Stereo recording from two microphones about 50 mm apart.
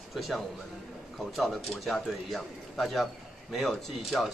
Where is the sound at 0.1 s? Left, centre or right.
Centre.